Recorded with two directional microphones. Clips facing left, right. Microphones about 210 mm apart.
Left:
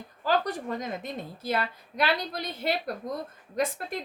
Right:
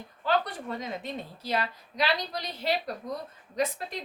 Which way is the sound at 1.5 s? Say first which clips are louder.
Left 1 dB; 55° left (ahead or behind).